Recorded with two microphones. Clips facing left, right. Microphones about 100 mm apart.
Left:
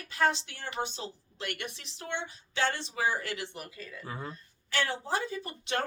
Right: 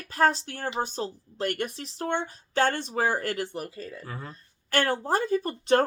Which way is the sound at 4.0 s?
10° left (ahead or behind).